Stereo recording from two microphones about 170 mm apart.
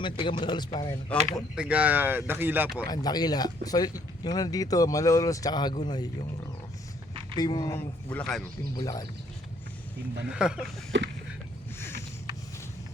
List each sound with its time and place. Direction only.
0.0 s speech: 30° left (ahead or behind)
1.5 s speech: 5° right (ahead or behind)
2.8 s speech: 25° left (ahead or behind)
7.3 s speech: 25° left (ahead or behind)
8.1 s speech: 5° left (ahead or behind)
8.7 s speech: 20° left (ahead or behind)
10.2 s speech: 5° right (ahead or behind)
10.9 s a sound: 90° right
11.8 s a sound: 15° left (ahead or behind)